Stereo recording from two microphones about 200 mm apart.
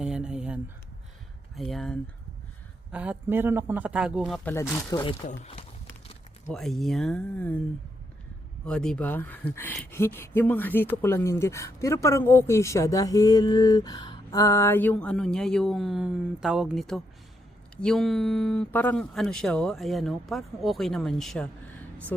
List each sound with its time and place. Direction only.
0.0 s a sound: 5° right (ahead or behind)
1.5 s a man's voice: centre (ahead or behind)
4.7 s speech: 20° left (ahead or behind)
5.4 s speech: 30° left (ahead or behind)
6.5 s speech: centre (ahead or behind)
8.6 s speech: 5° left (ahead or behind)